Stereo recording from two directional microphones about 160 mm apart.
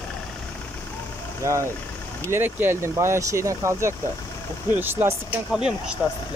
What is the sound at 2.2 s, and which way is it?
Speech, 15° right (ahead or behind).